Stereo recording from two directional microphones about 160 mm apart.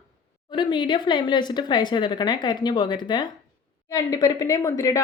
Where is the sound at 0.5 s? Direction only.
30° left (ahead or behind).